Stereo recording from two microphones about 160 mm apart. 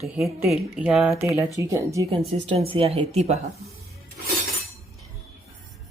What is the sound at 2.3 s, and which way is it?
A woman's voice, 35° right (ahead or behind).